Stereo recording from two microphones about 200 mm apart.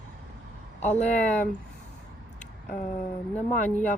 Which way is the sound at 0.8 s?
35° left (ahead or behind).